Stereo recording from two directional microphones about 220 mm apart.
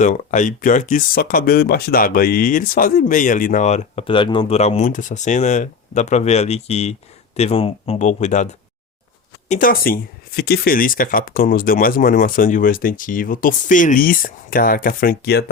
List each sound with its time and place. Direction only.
0.0 s speech: 35° left (ahead or behind)
9.5 s speech: 40° left (ahead or behind)